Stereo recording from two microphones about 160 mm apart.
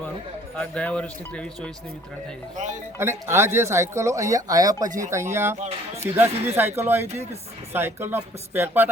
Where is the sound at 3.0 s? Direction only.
15° right (ahead or behind).